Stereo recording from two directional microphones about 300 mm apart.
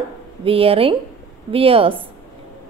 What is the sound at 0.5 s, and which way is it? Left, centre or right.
A woman's voice, centre.